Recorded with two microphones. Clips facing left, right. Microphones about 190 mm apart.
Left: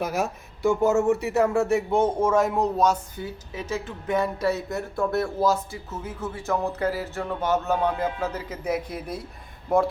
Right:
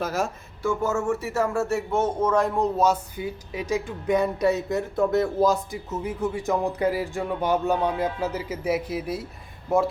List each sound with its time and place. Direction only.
0.0 s speech: 15° left (ahead or behind)
2.7 s a man's voice: 10° right (ahead or behind)